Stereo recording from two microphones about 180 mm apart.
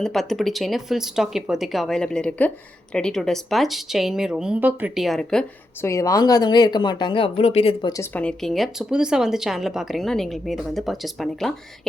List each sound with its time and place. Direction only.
0.0 s a woman's voice: centre (ahead or behind)
5.8 s speech: 15° left (ahead or behind)
8.1 s a woman's voice: 5° left (ahead or behind)